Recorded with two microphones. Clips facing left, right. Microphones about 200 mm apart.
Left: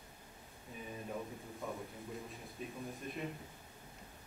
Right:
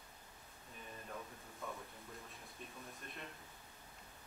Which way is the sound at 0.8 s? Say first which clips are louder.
Left 7 dB; 15° left (ahead or behind).